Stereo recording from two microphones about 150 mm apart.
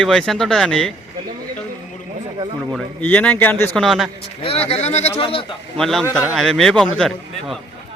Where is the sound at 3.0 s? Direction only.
10° left (ahead or behind).